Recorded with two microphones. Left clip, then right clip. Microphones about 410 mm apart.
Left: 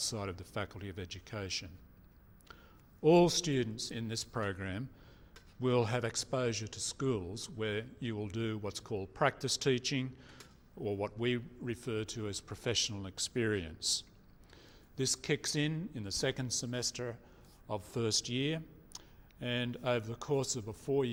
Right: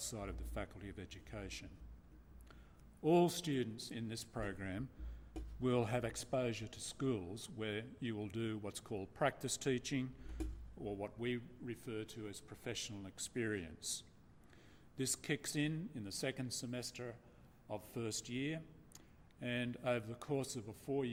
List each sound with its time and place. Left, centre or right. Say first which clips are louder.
0.0 s speech: left 8 dB; left
3.0 s speech: left 7 dB; left
10.8 s speech: left 8 dB; left